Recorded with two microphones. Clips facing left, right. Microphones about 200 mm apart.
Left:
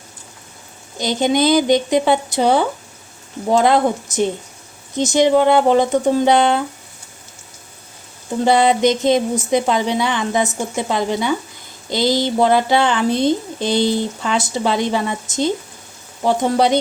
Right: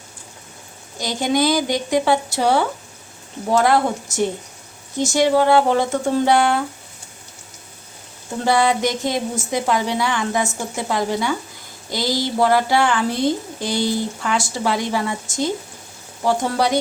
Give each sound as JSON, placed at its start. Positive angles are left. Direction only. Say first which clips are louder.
{"t": 0.9, "sound": "a woman's voice", "louder": "left 3 dB", "side_deg": 20}
{"t": 8.4, "sound": "a woman's voice", "louder": "left 4 dB", "side_deg": 20}